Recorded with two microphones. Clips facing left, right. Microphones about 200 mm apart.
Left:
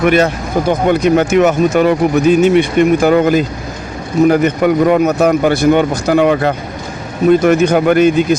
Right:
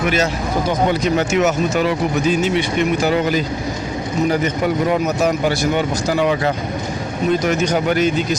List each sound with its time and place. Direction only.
0.0 s speech: 60° left (ahead or behind)